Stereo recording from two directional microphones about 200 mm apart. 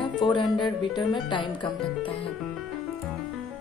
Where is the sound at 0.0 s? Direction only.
25° left (ahead or behind).